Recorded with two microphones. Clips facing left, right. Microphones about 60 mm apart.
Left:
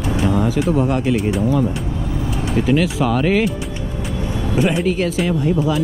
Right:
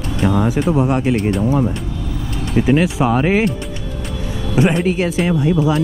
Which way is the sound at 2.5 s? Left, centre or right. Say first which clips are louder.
Right 3 dB; right.